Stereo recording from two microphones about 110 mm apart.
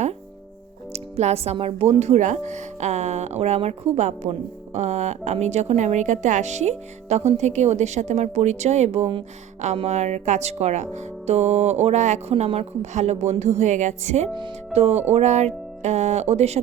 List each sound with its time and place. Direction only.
0.9 s music: 75° right (ahead or behind)
1.5 s speech: 65° right (ahead or behind); by 14.3 s 90° right
14.7 s music: 70° right (ahead or behind)
15.1 s speech: 90° right